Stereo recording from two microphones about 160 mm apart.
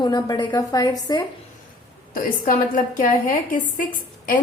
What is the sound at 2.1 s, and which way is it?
A woman's voice, 60° left (ahead or behind).